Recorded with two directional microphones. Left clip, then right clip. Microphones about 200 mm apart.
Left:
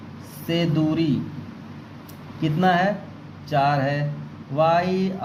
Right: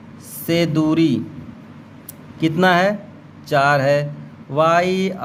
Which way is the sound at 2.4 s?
45° right (ahead or behind).